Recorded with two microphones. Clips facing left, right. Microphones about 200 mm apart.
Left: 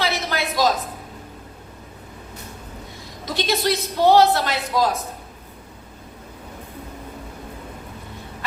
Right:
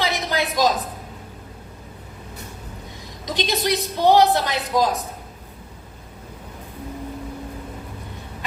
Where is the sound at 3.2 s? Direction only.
15° right (ahead or behind).